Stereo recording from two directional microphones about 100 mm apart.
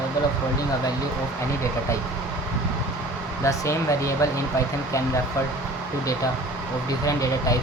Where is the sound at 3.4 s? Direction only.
30° left (ahead or behind).